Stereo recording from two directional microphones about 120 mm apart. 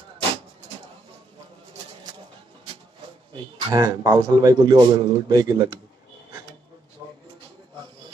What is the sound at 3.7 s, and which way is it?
Speech, 30° right (ahead or behind).